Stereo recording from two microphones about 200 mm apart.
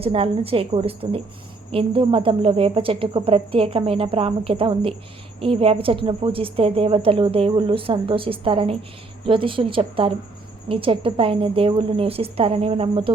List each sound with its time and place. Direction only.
0.0 s a woman's voice: 30° right (ahead or behind)